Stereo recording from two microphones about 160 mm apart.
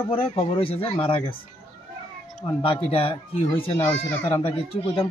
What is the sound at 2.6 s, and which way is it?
Speech, 35° left (ahead or behind).